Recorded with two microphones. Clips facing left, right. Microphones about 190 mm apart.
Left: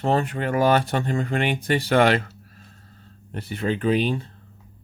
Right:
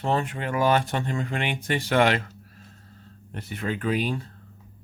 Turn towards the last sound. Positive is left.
turn(degrees=25)  # may be behind; listen again after turning